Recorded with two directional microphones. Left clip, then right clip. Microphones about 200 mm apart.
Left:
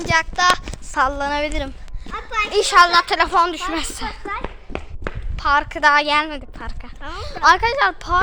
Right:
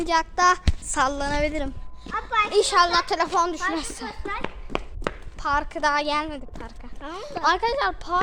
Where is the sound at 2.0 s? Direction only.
50° left (ahead or behind).